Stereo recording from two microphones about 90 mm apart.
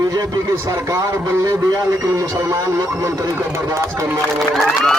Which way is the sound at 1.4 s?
40° right (ahead or behind).